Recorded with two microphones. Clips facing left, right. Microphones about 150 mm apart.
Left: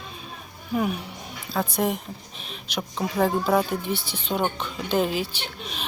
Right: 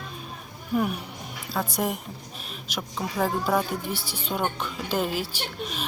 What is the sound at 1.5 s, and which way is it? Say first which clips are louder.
Speech: left 3 dB; 10° right (ahead or behind).